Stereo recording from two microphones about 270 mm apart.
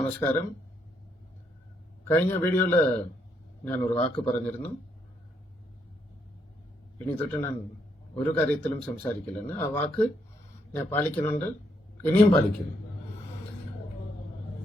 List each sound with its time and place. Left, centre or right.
0.0 s speech: centre
2.0 s speech: centre
7.2 s speech: centre